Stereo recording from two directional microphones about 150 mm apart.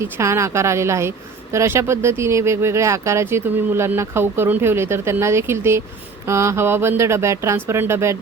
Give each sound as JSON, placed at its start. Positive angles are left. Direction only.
{"t": 0.0, "sound": "speech", "side_deg": -20}